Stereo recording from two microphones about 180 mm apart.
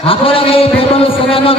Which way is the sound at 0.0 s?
30° left (ahead or behind).